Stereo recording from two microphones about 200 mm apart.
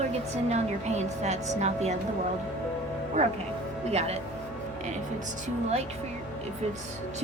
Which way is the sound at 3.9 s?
30° right (ahead or behind).